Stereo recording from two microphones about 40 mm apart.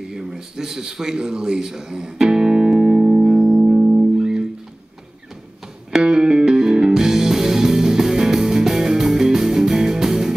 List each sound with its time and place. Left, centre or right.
0.0 s speech: centre
3.3 s music: centre
3.6 s music: right
5.9 s music: centre